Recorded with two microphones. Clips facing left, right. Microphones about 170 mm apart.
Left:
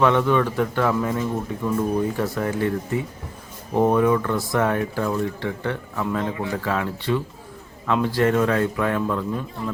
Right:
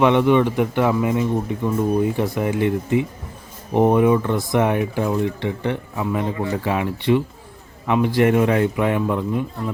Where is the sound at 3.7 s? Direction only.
20° right (ahead or behind).